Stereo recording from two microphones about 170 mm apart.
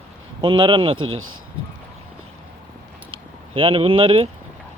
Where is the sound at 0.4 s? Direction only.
30° right (ahead or behind).